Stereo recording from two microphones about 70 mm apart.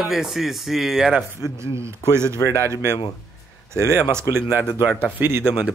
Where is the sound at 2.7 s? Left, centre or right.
Right.